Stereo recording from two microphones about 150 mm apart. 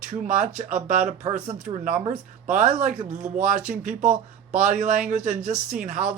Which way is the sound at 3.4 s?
60° right (ahead or behind).